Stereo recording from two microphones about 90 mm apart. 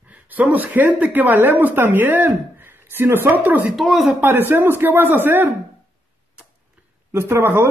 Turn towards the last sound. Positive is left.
turn(degrees=-25)  # may be behind; listen again after turning